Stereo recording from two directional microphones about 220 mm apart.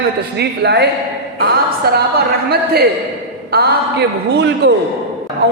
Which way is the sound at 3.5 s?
45° right (ahead or behind).